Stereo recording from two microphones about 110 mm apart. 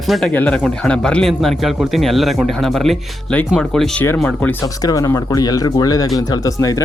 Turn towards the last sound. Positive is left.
turn(degrees=30)  # may be behind; listen again after turning